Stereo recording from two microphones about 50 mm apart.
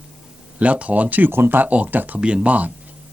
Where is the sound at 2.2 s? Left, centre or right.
Right.